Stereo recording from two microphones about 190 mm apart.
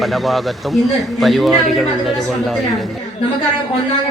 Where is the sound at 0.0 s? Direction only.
Centre (ahead or behind).